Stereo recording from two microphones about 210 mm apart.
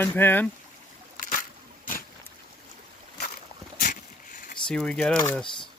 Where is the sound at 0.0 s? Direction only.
10° left (ahead or behind).